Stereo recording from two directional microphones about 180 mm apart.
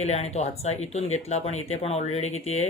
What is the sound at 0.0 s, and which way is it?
Speech, 35° left (ahead or behind).